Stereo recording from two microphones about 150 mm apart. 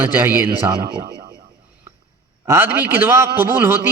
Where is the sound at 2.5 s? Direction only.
15° right (ahead or behind).